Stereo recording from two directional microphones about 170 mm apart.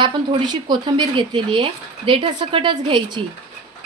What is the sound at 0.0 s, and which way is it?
Speech, 25° right (ahead or behind).